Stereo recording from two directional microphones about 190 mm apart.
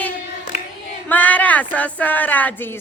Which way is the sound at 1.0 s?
10° left (ahead or behind).